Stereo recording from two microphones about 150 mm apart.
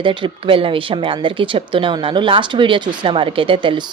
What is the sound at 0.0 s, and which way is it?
A woman's voice, 35° right (ahead or behind).